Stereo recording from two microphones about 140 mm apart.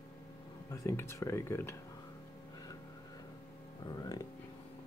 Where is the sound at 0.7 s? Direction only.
20° left (ahead or behind).